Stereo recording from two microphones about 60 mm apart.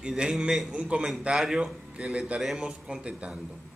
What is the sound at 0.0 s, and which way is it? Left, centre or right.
Speech, centre.